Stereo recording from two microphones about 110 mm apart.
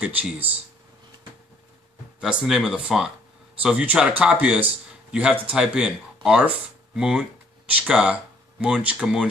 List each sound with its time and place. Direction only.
0.0 s speech: 15° right (ahead or behind)
2.1 s speech: 5° right (ahead or behind)
7.0 s a sound: 5° right (ahead or behind)
7.9 s speech: 10° right (ahead or behind)